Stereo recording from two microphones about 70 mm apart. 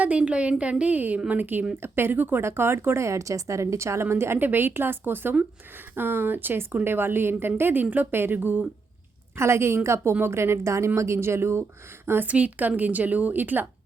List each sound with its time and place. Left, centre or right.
0.0 s a woman's voice: centre
9.3 s a woman's voice: right